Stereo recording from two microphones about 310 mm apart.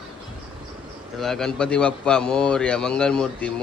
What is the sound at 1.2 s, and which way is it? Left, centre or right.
A man's voice, centre.